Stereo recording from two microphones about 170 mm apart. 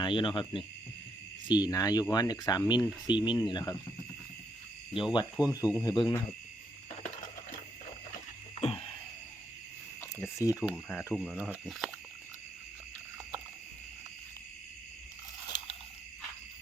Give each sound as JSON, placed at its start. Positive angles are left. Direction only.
{"t": 0.0, "sound": "speech", "side_deg": 30}
{"t": 5.1, "sound": "speech", "side_deg": 25}
{"t": 8.6, "sound": "a sound", "side_deg": 35}
{"t": 10.0, "sound": "speech", "side_deg": 15}
{"t": 11.1, "sound": "speech", "side_deg": 0}